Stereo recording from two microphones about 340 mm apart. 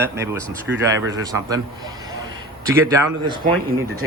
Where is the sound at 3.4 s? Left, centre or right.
Centre.